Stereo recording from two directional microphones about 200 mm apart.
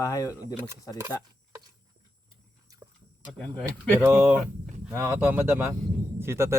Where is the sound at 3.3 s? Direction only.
Centre (ahead or behind).